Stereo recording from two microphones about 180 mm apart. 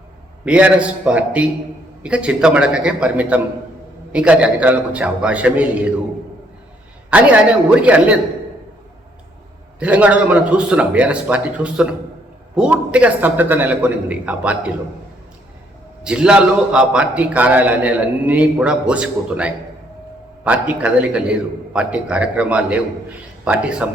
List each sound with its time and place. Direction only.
0.4 s a man's voice: 5° right (ahead or behind)
7.1 s a man's voice: 5° right (ahead or behind)
9.8 s a man's voice: 10° right (ahead or behind)
16.0 s a man's voice: 5° right (ahead or behind)